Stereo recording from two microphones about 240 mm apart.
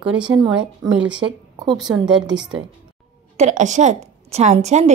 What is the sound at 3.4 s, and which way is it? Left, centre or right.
A woman's voice, right.